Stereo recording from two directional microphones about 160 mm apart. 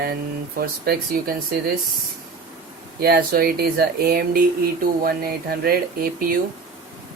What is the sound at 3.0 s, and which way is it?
Speech, 70° right (ahead or behind).